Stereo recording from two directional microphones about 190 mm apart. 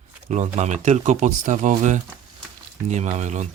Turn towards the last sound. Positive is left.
turn(degrees=-40)  # may be behind; listen again after turning